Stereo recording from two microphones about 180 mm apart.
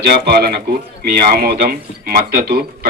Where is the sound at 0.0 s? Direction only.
60° right (ahead or behind).